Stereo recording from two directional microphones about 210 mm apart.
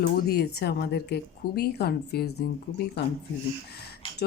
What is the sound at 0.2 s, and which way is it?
Speech, 50° left (ahead or behind).